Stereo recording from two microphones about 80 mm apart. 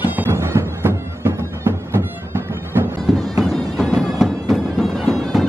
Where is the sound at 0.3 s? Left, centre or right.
Right.